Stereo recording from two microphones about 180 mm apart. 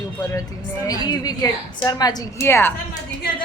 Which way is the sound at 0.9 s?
20° left (ahead or behind).